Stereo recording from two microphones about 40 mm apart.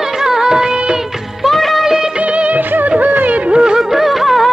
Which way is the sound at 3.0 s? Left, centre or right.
Right.